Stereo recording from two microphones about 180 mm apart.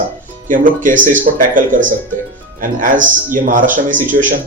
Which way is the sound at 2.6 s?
50° right (ahead or behind).